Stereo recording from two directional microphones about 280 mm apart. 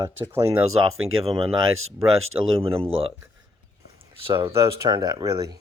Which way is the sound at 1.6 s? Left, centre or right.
Right.